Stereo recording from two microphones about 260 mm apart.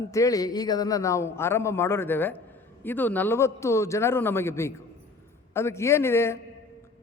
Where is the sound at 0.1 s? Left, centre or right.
Centre.